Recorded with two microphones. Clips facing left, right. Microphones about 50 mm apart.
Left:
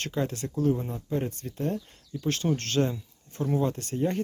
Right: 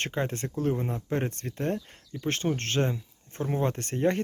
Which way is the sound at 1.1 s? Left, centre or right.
Right.